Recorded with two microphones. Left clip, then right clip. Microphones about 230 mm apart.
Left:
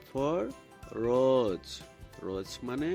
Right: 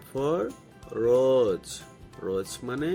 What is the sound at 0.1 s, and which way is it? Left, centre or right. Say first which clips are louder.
Speech: right 4 dB; left.